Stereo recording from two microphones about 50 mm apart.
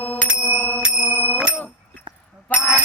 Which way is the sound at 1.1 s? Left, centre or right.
Right.